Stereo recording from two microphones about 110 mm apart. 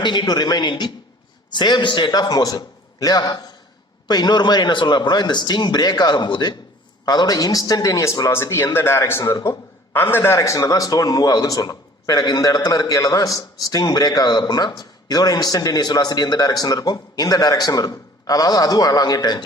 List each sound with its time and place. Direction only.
0.0 s a man's voice: 45° left (ahead or behind)